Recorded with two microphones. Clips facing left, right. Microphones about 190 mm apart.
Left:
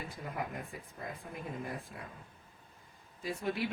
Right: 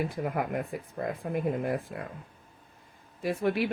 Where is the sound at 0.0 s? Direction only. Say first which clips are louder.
Right 10 dB; 65° right (ahead or behind).